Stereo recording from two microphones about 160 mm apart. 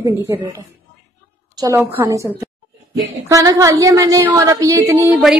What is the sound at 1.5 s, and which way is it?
A woman's voice, 20° right (ahead or behind).